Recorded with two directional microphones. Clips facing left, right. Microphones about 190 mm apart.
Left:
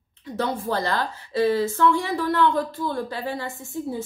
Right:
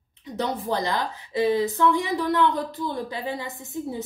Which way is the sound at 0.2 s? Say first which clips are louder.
Left 1 dB; 20° right (ahead or behind).